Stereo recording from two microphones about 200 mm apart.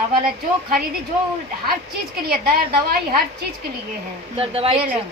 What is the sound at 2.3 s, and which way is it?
Speech, 50° right (ahead or behind).